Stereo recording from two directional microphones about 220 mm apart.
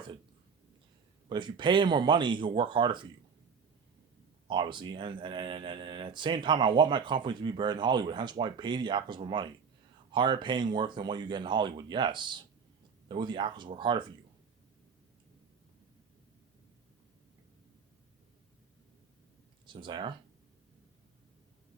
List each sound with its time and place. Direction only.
1.3 s speech: 20° right (ahead or behind)
4.4 s speech: 20° right (ahead or behind)
19.6 s speech: 20° right (ahead or behind)